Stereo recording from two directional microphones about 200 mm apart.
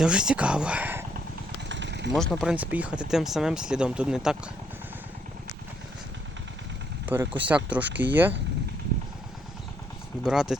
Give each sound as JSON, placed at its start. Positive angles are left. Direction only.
{"t": 0.0, "sound": "speech", "side_deg": -5}
{"t": 1.7, "sound": "a sound", "side_deg": -60}
{"t": 2.1, "sound": "speech", "side_deg": 5}
{"t": 7.0, "sound": "speech", "side_deg": -10}
{"t": 10.2, "sound": "speech", "side_deg": 0}